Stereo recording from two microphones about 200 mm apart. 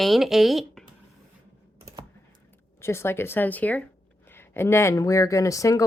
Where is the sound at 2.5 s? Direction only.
10° left (ahead or behind).